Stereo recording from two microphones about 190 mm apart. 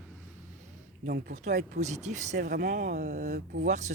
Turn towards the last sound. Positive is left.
turn(degrees=-40)  # may be behind; listen again after turning